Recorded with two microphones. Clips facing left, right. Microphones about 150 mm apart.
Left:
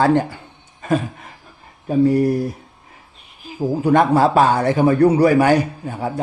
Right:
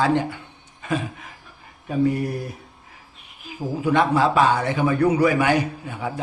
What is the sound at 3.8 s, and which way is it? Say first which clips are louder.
A man's voice: left 4 dB; 45° left (ahead or behind).